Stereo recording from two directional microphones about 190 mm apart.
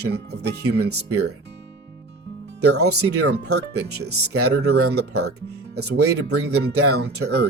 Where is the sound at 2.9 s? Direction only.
60° right (ahead or behind).